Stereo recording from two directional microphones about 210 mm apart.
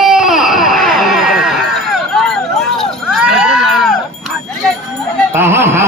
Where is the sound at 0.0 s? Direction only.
Centre (ahead or behind).